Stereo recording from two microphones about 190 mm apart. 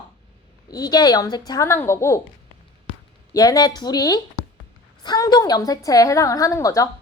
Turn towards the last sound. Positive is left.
turn(degrees=15)  # may be behind; listen again after turning